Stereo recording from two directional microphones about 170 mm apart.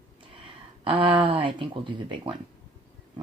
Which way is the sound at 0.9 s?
30° right (ahead or behind).